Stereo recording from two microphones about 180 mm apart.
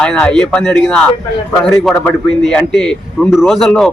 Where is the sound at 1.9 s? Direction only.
15° left (ahead or behind).